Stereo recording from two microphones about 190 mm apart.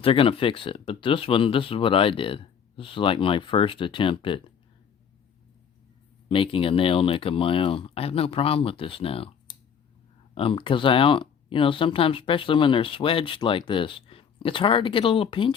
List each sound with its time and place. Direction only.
0.0 s speech: 30° left (ahead or behind)
6.2 s speech: 30° left (ahead or behind)